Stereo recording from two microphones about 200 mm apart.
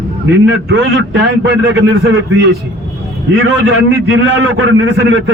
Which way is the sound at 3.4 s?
60° right (ahead or behind).